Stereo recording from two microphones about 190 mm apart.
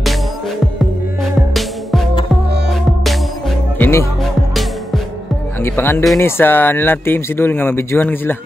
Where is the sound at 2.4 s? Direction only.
60° right (ahead or behind).